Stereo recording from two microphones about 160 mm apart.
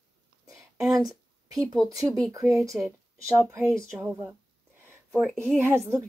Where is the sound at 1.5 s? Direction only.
20° right (ahead or behind).